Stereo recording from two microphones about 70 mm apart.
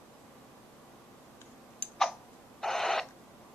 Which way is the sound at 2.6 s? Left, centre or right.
Centre.